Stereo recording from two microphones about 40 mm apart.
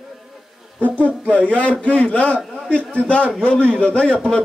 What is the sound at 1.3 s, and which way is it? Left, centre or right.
A man's voice, left.